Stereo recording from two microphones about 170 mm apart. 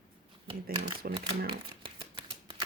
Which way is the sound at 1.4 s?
30° right (ahead or behind).